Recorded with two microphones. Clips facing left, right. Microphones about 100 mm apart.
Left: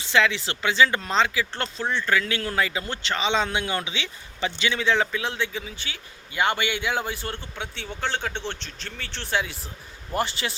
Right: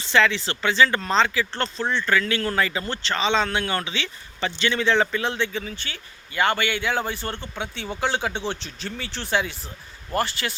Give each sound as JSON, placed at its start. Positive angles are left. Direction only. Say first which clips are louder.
{"t": 0.0, "sound": "speech", "louder": "right 2 dB", "side_deg": 10}
{"t": 10.1, "sound": "speech", "louder": "right 1 dB", "side_deg": 20}